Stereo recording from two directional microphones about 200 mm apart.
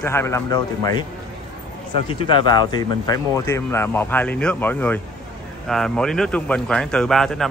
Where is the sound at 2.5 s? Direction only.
20° left (ahead or behind); by 7.4 s centre (ahead or behind).